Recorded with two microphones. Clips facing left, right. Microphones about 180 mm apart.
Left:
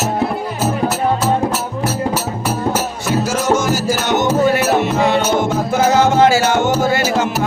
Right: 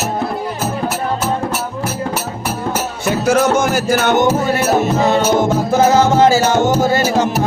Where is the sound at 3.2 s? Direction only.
60° right (ahead or behind).